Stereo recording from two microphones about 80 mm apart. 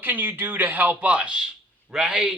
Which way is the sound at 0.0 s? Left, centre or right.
Right.